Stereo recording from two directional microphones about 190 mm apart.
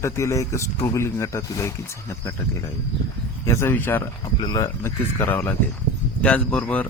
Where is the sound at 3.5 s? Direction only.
15° left (ahead or behind).